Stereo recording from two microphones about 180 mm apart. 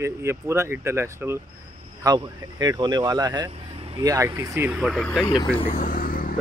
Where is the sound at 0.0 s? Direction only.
15° right (ahead or behind).